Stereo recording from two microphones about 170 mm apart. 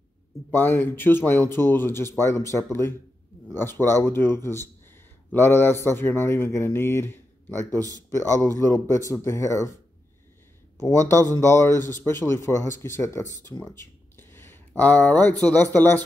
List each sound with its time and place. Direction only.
0.5 s speech: 10° left (ahead or behind)
10.8 s speech: 15° left (ahead or behind)